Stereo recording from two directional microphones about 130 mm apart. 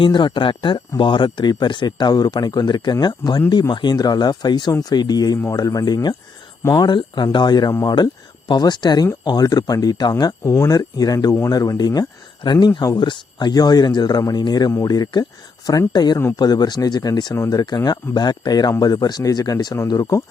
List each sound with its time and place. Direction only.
0.0 s speech: 35° left (ahead or behind)
6.6 s speech: 20° left (ahead or behind)
6.8 s speech: 35° left (ahead or behind)